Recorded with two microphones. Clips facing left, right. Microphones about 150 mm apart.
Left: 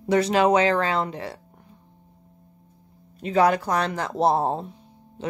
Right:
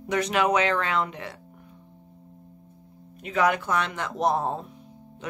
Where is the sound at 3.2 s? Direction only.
35° left (ahead or behind).